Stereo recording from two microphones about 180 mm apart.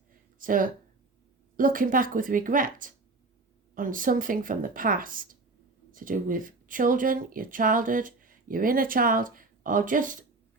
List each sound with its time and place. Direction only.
0.3 s speech: 50° right (ahead or behind)